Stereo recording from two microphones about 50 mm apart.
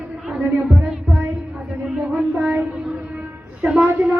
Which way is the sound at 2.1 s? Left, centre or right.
Right.